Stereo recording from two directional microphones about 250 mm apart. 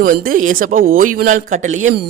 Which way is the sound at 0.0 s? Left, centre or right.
Right.